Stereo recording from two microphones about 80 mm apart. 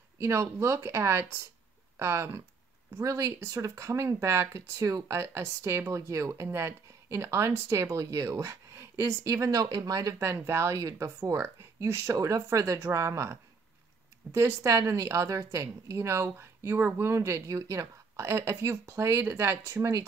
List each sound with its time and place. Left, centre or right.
0.2 s speech: right
10.1 s speech: right
11.3 s speech: right